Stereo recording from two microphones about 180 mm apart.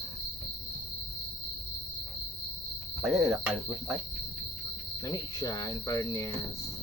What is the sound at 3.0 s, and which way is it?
Cricket, centre (ahead or behind).